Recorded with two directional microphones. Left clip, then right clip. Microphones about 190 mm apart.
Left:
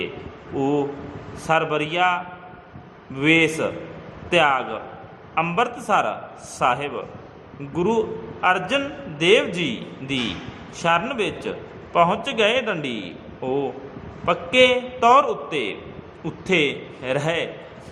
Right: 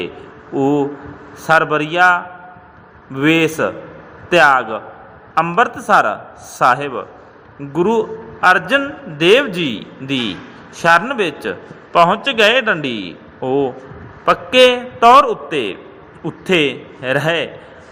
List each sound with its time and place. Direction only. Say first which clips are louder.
0.5 s a man's voice: right 6 dB; 25° right (ahead or behind)